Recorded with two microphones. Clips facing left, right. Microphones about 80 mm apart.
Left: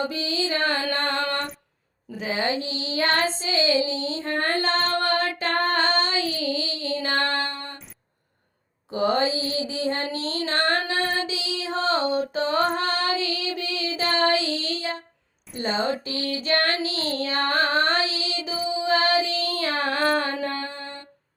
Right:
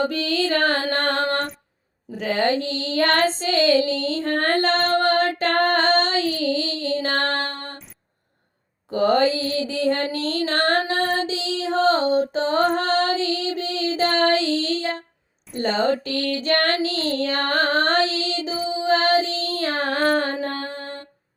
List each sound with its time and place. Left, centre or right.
0.0 s music: right
2.1 s female singing: right
8.9 s female singing: right
10.1 s child singing: right